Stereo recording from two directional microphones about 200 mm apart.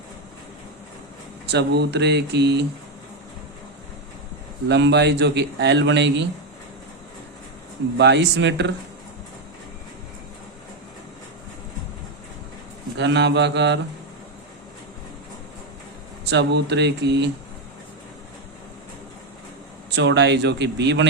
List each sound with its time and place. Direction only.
1.5 s a man's voice: 55° right (ahead or behind)
4.7 s a man's voice: 60° right (ahead or behind)
7.9 s a man's voice: 60° right (ahead or behind)
13.0 s a man's voice: 60° right (ahead or behind)
16.2 s a man's voice: 60° right (ahead or behind)
20.0 s a man's voice: 60° right (ahead or behind)